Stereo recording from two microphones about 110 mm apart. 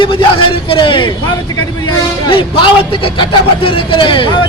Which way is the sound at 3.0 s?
50° left (ahead or behind).